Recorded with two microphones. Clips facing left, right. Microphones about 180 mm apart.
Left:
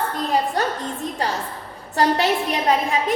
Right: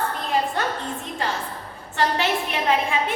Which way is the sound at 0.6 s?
40° left (ahead or behind).